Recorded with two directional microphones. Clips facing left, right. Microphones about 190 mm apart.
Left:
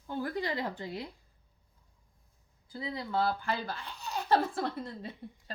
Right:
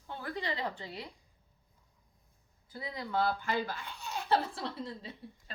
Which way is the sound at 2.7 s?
30° left (ahead or behind).